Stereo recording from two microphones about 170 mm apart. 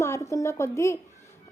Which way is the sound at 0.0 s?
15° left (ahead or behind).